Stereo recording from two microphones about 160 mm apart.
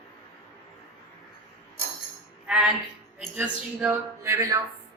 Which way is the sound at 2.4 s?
5° right (ahead or behind).